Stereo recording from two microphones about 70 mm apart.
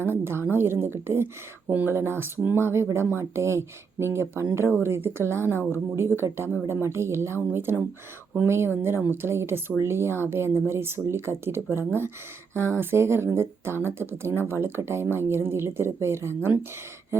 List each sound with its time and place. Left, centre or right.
0.0 s speech: right
1.6 s speech: right
1.9 s speech: right